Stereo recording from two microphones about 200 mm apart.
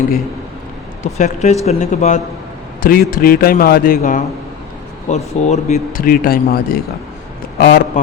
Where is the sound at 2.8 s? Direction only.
45° left (ahead or behind).